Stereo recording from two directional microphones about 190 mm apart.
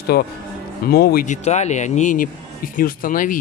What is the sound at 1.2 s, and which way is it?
Speech, 35° left (ahead or behind).